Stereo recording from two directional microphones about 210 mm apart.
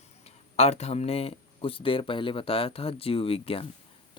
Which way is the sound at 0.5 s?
30° left (ahead or behind).